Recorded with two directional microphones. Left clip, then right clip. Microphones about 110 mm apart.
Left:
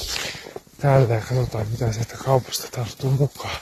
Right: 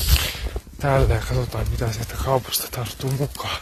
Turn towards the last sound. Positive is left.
turn(degrees=-15)  # may be behind; listen again after turning